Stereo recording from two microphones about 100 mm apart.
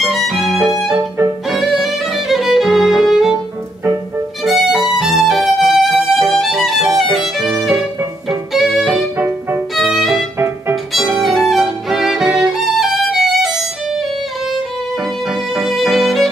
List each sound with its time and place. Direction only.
0.0 s violin: centre (ahead or behind)
0.9 s violin: 25° right (ahead or behind)
1.5 s music: centre (ahead or behind)
4.5 s music: centre (ahead or behind)
8.3 s violin: centre (ahead or behind)
10.9 s music: centre (ahead or behind)
12.4 s violin: centre (ahead or behind)
15.5 s music: centre (ahead or behind)